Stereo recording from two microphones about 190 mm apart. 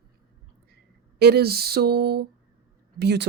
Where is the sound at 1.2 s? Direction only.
55° right (ahead or behind).